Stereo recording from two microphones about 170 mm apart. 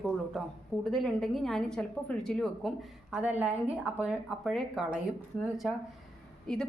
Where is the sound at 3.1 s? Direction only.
10° right (ahead or behind).